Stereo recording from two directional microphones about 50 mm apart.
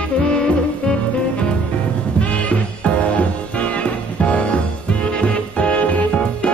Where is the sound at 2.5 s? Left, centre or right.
Left.